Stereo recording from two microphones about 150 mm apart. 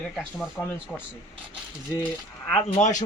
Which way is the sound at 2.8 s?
55° left (ahead or behind).